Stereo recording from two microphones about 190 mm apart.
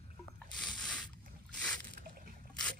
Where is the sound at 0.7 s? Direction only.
5° left (ahead or behind).